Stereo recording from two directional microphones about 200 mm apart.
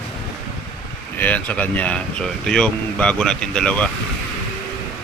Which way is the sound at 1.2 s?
5° left (ahead or behind).